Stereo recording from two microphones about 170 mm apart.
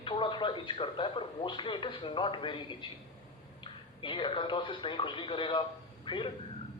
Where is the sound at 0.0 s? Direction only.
30° left (ahead or behind).